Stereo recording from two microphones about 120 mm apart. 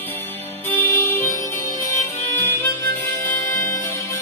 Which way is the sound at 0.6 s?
20° left (ahead or behind).